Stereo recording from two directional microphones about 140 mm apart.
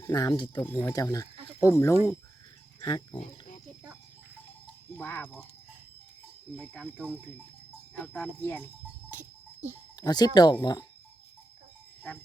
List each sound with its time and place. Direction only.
0.0 s speech: 30° left (ahead or behind)
2.8 s speech: 30° left (ahead or behind)
4.9 s speech: 15° left (ahead or behind)
6.6 s speech: 5° left (ahead or behind)
9.0 s goat: 60° right (ahead or behind)
9.9 s speech: 30° left (ahead or behind)